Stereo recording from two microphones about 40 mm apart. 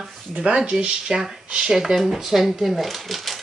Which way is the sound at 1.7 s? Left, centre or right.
Centre.